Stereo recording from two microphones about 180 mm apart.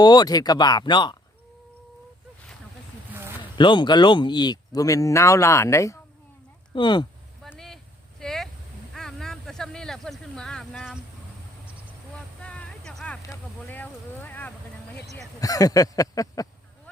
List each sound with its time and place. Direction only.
0.0 s speech: 25° left (ahead or behind)
3.5 s speech: 25° left (ahead or behind)
7.4 s vehicle: centre (ahead or behind)
8.2 s a sound: centre (ahead or behind)
12.4 s a sound: 5° left (ahead or behind)
15.4 s speech: 20° left (ahead or behind)